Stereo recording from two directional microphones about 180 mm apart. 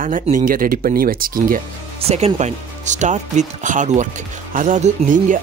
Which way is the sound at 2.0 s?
35° right (ahead or behind).